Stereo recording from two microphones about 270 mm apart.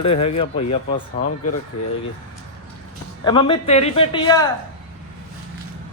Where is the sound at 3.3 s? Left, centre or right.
Centre.